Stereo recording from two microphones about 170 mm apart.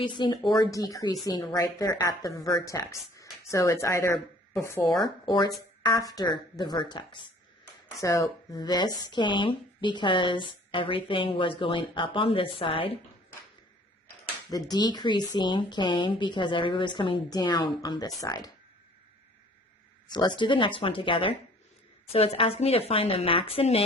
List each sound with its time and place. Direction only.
0.0 s a woman's voice: 25° left (ahead or behind)
14.5 s a woman's voice: 25° left (ahead or behind)
20.1 s a woman's voice: 25° left (ahead or behind)